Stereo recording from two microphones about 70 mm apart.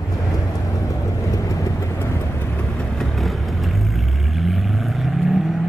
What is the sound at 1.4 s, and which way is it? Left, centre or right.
Train, left.